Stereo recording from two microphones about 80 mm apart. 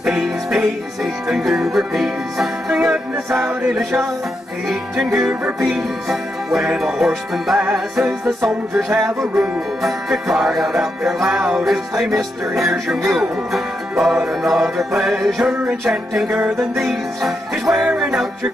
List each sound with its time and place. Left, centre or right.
0.0 s music: centre
4.6 s music: centre
16.3 s music: right
16.7 s music: centre